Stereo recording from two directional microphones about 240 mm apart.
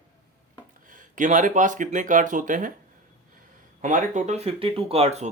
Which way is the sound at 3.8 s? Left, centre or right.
Right.